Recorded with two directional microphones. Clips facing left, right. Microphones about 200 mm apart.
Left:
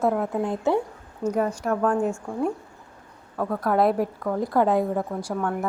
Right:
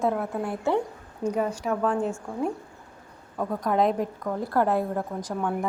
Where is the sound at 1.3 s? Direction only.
10° right (ahead or behind).